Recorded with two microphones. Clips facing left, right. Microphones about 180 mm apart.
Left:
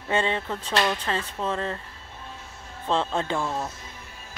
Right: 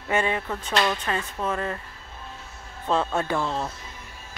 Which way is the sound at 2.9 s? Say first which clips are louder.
Right 1 dB; 25° left (ahead or behind).